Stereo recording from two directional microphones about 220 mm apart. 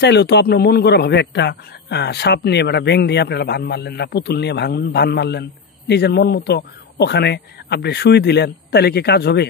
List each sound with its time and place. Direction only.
0.0 s a man's voice: 50° left (ahead or behind)